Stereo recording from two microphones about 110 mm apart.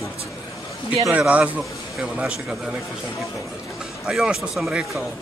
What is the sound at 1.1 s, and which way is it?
Speech, 10° right (ahead or behind).